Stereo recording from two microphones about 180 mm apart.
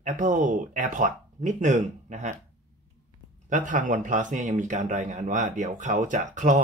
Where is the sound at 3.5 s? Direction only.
45° right (ahead or behind).